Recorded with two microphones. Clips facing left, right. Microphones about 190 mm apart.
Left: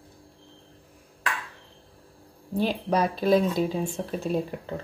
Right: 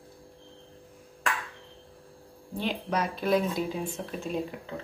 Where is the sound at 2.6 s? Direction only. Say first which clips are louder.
Left 5 dB; 35° left (ahead or behind).